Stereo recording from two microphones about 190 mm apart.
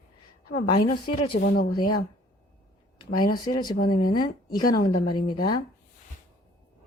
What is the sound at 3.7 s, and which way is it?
Speech, 50° left (ahead or behind).